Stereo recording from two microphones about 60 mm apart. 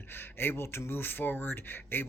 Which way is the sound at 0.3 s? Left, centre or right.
Left.